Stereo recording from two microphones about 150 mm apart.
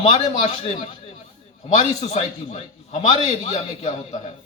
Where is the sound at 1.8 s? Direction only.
40° left (ahead or behind).